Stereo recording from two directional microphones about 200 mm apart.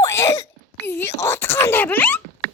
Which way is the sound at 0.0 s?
15° left (ahead or behind).